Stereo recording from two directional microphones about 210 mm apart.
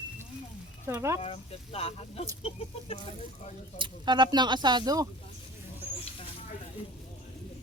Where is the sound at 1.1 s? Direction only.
25° left (ahead or behind).